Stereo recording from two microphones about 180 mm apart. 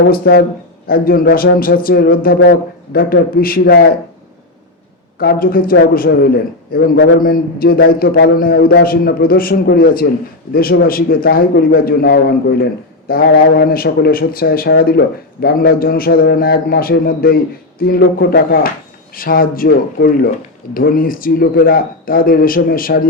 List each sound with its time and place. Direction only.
0.1 s a man's voice: 55° left (ahead or behind)
5.2 s a man's voice: 55° left (ahead or behind)
8.4 s a man's voice: 55° left (ahead or behind)
14.7 s a man's voice: 75° left (ahead or behind); by 23.0 s 55° left (ahead or behind)